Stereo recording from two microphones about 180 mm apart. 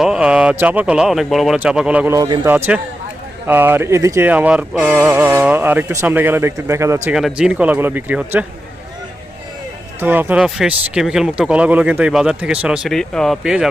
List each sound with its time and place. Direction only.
0.0 s speech: 5° right (ahead or behind)
2.1 s speech: 20° right (ahead or behind)
2.5 s speech: 10° right (ahead or behind)
7.2 s speech: 5° right (ahead or behind)
10.0 s speech: 10° right (ahead or behind)